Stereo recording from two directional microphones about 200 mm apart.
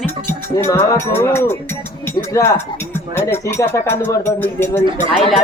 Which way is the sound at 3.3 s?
10° left (ahead or behind).